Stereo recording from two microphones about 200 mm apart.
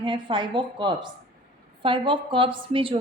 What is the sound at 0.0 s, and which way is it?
A woman's voice, 25° right (ahead or behind).